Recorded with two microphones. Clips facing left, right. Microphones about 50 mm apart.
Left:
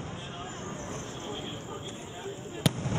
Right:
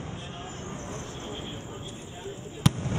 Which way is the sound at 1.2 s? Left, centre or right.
Right.